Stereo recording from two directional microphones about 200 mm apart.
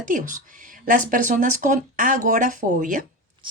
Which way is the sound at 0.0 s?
40° right (ahead or behind).